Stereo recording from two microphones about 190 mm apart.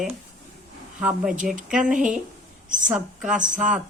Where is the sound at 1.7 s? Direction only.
5° right (ahead or behind).